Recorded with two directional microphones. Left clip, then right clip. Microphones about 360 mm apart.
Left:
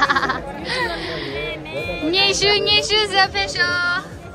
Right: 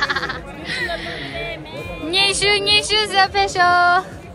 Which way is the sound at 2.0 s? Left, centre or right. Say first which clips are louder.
Even; centre.